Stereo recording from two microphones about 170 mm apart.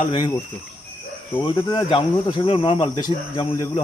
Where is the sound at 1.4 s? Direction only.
25° left (ahead or behind).